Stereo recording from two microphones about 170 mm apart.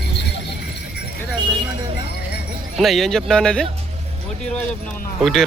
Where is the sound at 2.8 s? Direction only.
Centre (ahead or behind).